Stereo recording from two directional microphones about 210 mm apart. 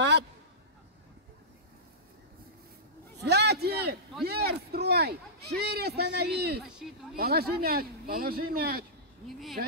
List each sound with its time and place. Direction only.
3.2 s a sound: 50° right (ahead or behind)
4.2 s a man's voice: 50° right (ahead or behind)
6.6 s speech: centre (ahead or behind)
7.2 s speech: 45° right (ahead or behind)